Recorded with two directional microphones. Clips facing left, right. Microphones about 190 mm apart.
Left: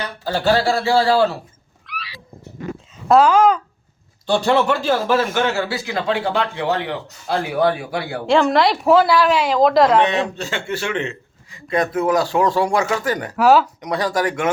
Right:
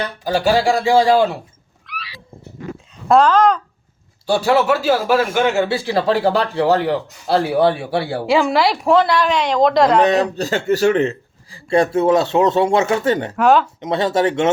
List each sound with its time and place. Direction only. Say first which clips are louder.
0.3 s a man's voice: right 2 dB; 10° right (ahead or behind)
1.9 s cat: even; centre (ahead or behind)
2.9 s speech: even; 5° left (ahead or behind)
4.3 s speech: right 2 dB; 5° right (ahead or behind); by 8.3 s 30° right (ahead or behind)
8.3 s a woman's voice: left 1 dB; centre (ahead or behind)
10.0 s speech: right 4 dB; 40° right (ahead or behind)
13.3 s a woman's voice: left 2 dB; 5° left (ahead or behind)
13.7 s speech: right 3 dB; 25° right (ahead or behind)